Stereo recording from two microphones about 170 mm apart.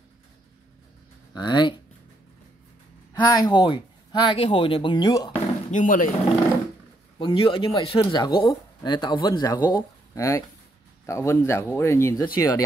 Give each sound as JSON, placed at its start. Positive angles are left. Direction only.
{"t": 1.3, "sound": "speech", "side_deg": 25}
{"t": 3.1, "sound": "speech", "side_deg": 20}
{"t": 5.7, "sound": "speech", "side_deg": 50}
{"t": 7.2, "sound": "speech", "side_deg": 30}